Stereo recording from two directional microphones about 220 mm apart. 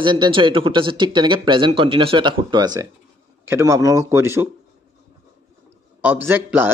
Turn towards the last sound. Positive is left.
turn(degrees=-10)  # may be behind; listen again after turning